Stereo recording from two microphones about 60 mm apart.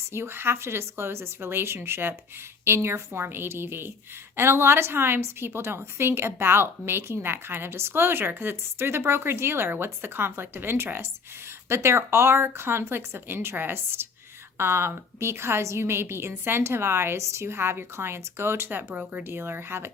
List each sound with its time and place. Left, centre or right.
0.1 s a woman's voice: right
19.2 s a woman's voice: right